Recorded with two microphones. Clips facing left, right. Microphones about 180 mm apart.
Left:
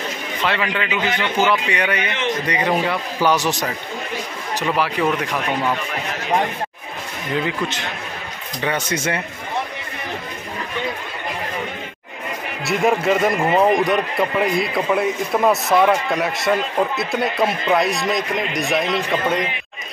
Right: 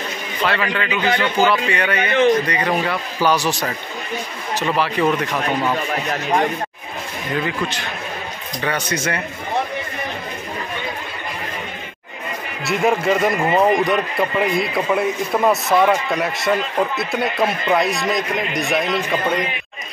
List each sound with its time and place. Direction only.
0.5 s a man's voice: 15° left (ahead or behind)
7.4 s speech: 20° left (ahead or behind)
12.6 s a man's voice: centre (ahead or behind)